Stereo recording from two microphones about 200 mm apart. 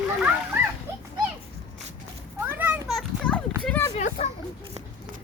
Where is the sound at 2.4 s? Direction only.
10° right (ahead or behind).